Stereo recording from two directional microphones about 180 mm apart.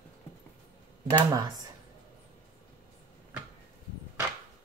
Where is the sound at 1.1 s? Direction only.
20° right (ahead or behind).